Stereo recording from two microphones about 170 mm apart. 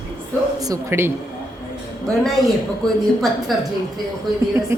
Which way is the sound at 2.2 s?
Centre (ahead or behind).